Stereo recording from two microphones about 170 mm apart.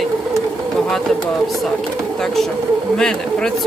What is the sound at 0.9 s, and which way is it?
Speech, centre (ahead or behind).